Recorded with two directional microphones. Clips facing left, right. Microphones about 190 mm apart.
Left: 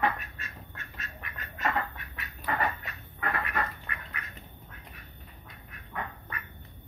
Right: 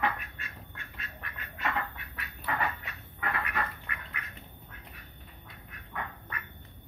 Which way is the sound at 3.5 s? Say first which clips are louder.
Left 2 dB; 40° left (ahead or behind).